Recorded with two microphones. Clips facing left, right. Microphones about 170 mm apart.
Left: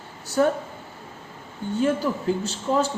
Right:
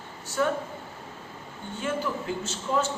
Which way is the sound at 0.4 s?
40° left (ahead or behind).